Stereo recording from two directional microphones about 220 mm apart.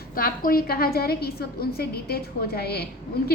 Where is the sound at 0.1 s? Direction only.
40° left (ahead or behind).